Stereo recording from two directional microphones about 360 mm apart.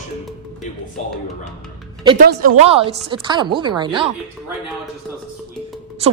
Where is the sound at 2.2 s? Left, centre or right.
Right.